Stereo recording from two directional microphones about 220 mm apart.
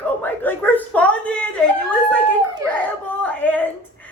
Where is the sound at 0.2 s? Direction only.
10° left (ahead or behind).